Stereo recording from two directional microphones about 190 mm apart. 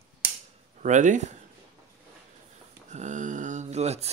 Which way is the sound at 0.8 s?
40° right (ahead or behind).